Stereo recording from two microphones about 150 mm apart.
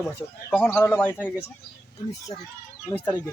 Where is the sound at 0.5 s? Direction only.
10° left (ahead or behind).